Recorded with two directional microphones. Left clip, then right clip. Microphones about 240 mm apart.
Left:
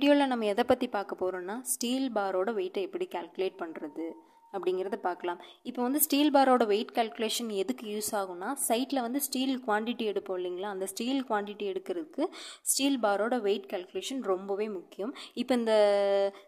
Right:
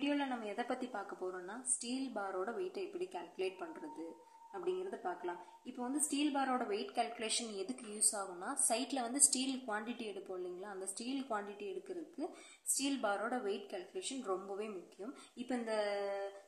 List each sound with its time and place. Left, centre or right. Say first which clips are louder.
0.0 s a woman's voice: left 13 dB; left
5.8 s a woman's voice: left 10 dB; left
12.7 s a woman's voice: left 10 dB; left